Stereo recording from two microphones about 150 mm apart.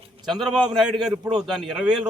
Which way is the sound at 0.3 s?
Centre (ahead or behind).